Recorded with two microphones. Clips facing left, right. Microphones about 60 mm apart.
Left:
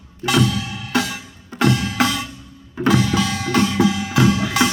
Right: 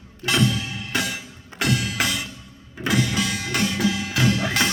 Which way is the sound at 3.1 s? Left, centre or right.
Centre.